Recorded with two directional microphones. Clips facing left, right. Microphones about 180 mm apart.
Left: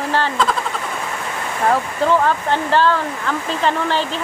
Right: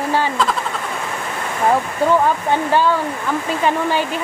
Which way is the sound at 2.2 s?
10° right (ahead or behind).